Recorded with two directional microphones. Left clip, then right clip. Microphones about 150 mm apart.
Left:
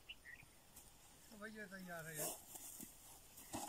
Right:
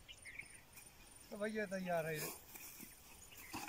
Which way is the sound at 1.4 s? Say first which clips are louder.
Right 11 dB; 40° right (ahead or behind).